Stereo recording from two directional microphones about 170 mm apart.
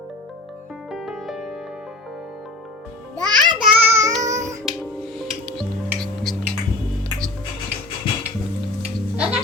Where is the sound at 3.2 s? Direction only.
25° right (ahead or behind).